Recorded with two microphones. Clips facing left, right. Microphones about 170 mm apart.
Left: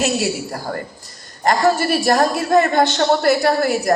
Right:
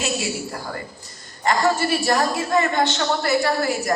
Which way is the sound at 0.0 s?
40° left (ahead or behind).